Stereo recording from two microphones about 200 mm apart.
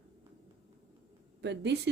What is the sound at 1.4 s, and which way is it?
Speech, 60° right (ahead or behind).